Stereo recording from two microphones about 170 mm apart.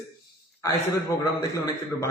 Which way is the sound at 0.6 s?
20° left (ahead or behind).